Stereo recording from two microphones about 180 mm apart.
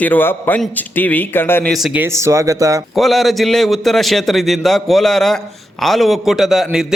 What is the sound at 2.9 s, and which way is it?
Speech, centre (ahead or behind).